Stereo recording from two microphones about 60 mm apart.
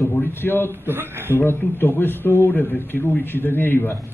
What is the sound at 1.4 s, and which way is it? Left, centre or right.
A man's voice, left.